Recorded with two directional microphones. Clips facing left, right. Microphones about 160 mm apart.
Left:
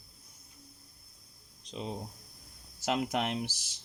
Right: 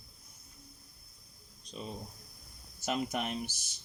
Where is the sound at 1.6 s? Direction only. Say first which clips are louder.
Left 4 dB; 90° left.